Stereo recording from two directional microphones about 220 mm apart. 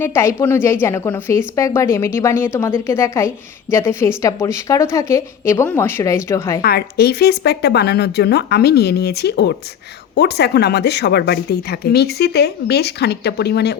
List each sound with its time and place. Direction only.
0.0 s a woman's voice: 10° left (ahead or behind)
6.6 s a woman's voice: 45° left (ahead or behind)